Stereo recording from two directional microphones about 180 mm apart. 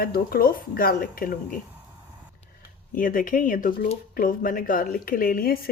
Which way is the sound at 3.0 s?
50° left (ahead or behind).